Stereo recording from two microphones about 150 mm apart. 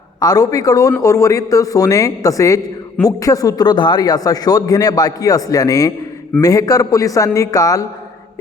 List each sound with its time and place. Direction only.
0.2 s a man's voice: 25° left (ahead or behind)